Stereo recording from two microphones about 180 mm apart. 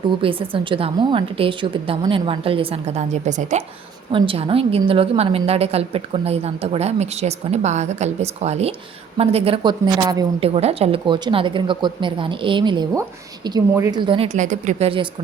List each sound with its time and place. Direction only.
0.2 s a woman's voice: 30° right (ahead or behind)
4.1 s a woman's voice: 30° right (ahead or behind)
10.4 s speech: 35° right (ahead or behind)
14.3 s a woman's voice: 45° right (ahead or behind)